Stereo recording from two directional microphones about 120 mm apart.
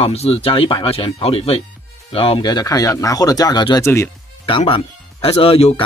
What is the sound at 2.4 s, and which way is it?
Speech, 35° left (ahead or behind).